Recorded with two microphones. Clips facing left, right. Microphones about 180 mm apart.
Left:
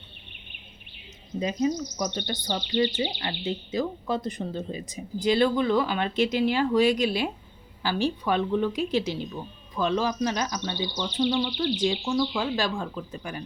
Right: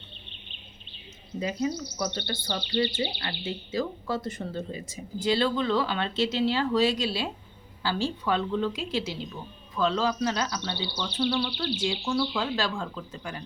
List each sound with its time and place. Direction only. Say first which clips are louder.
1.4 s speech: left 3 dB; 10° left (ahead or behind)